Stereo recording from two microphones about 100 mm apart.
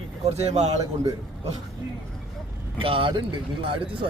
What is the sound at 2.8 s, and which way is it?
Speech, 60° right (ahead or behind).